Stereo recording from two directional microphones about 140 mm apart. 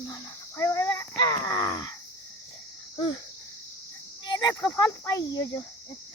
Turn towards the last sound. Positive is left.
turn(degrees=20)  # may be behind; listen again after turning